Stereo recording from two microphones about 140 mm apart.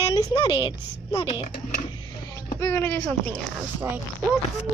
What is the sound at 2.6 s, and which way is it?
Speech, 20° left (ahead or behind).